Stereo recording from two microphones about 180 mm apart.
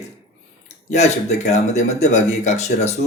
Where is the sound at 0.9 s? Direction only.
40° left (ahead or behind).